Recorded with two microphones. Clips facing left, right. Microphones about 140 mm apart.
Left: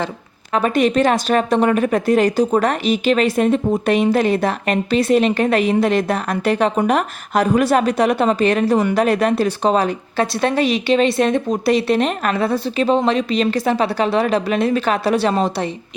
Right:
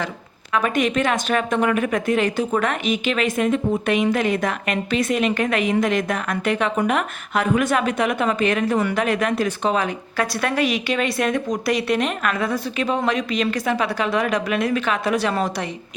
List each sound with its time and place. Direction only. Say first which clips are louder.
0.5 s speech: left 4 dB; 35° left (ahead or behind)